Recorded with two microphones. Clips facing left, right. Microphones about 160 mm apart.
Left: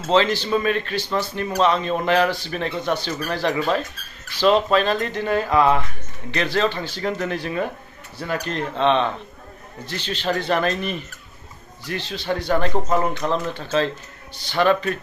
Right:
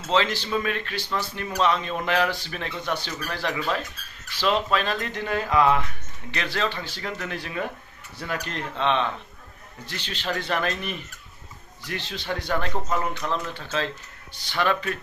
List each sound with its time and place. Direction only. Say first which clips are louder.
0.0 s speech: left 5 dB; 35° left (ahead or behind)
12.4 s speech: left 6 dB; 25° left (ahead or behind)